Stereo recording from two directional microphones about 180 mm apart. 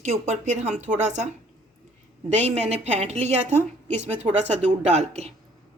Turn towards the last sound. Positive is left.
turn(degrees=-40)  # may be behind; listen again after turning